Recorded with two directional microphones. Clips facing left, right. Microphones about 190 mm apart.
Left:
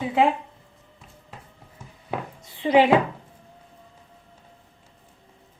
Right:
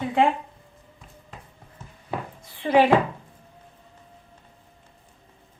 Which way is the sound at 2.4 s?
20° left (ahead or behind).